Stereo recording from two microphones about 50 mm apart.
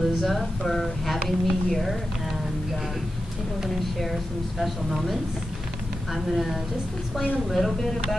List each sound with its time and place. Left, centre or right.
0.0 s speech: centre
3.6 s speech: centre
6.1 s speech: centre